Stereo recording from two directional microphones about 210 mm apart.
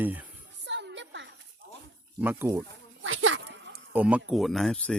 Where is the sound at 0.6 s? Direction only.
55° right (ahead or behind).